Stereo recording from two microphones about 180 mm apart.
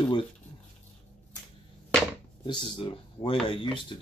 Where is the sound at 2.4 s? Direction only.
30° left (ahead or behind).